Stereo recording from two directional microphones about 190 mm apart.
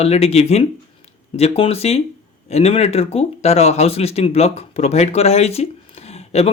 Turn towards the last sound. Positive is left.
turn(degrees=35)  # may be behind; listen again after turning